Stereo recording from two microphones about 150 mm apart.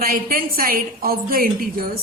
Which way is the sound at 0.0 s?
75° right (ahead or behind).